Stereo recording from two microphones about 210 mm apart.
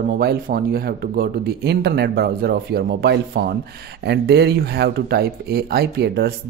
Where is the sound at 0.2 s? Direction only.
45° right (ahead or behind).